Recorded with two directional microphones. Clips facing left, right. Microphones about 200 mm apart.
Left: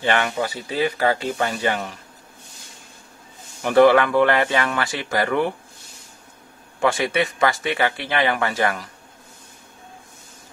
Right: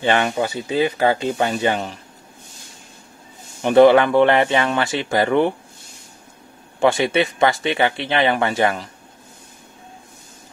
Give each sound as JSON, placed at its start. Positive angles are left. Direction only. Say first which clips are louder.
{"t": 0.0, "sound": "speech", "louder": "right 3 dB", "side_deg": -25}
{"t": 3.6, "sound": "speech", "louder": "right 3 dB", "side_deg": -25}
{"t": 6.8, "sound": "speech", "louder": "right 4 dB", "side_deg": -25}